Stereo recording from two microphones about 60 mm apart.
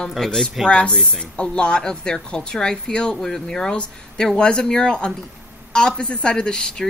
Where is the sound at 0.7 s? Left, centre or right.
Centre.